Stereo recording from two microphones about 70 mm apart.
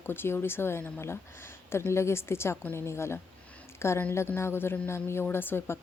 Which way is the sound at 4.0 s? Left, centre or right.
Left.